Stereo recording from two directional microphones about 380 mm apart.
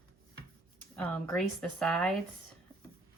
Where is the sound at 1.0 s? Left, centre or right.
Centre.